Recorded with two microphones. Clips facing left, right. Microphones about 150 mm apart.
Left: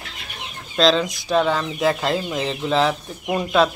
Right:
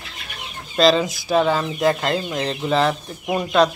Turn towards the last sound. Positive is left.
turn(degrees=0)  # may be behind; listen again after turning